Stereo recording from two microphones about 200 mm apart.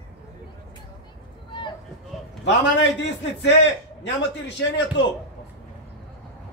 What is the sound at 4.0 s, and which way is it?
Speech, 60° left (ahead or behind).